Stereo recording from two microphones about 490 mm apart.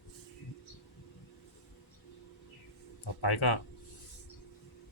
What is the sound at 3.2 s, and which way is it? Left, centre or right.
Speech, left.